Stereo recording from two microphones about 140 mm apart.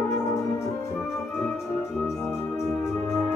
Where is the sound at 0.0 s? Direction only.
20° left (ahead or behind).